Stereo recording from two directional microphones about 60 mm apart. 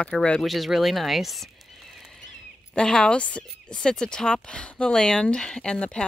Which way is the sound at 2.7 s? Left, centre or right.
Centre.